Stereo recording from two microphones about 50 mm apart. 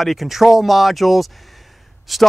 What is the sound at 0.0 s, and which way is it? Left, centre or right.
Speech, centre.